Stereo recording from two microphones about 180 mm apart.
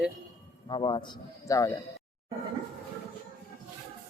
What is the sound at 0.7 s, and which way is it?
Speech, 30° left (ahead or behind).